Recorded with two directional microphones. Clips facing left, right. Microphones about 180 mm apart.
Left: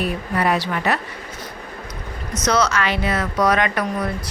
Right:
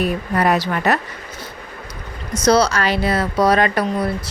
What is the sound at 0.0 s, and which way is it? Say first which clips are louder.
Speech: right 3 dB; 45° right (ahead or behind).